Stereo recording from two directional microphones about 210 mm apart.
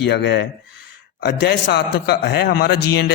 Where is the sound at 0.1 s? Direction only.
55° left (ahead or behind).